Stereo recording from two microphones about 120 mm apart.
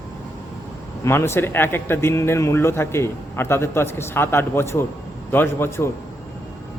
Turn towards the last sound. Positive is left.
turn(degrees=20)  # may be behind; listen again after turning